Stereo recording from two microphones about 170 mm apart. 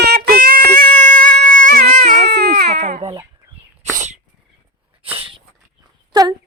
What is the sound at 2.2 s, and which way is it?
Baby cry, 75° right (ahead or behind).